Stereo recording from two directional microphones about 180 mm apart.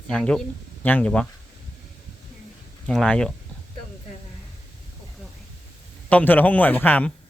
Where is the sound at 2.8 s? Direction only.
5° left (ahead or behind).